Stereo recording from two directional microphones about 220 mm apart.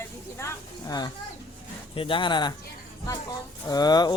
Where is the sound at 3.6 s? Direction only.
15° left (ahead or behind).